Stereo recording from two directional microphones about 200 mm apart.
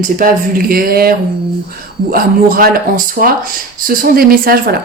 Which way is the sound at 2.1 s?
45° right (ahead or behind).